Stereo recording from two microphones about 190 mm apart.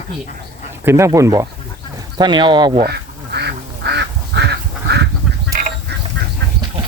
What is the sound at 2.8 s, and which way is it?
Duck, 60° right (ahead or behind).